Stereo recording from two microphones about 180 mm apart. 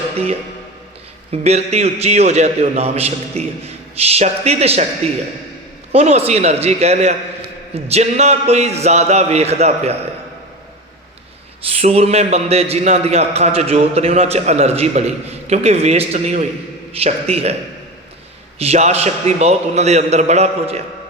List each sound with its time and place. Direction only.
1.3 s a man's voice: 35° right (ahead or behind)
5.9 s a man's voice: 35° right (ahead or behind)
11.6 s a man's voice: 35° right (ahead or behind)
18.6 s a man's voice: 35° right (ahead or behind)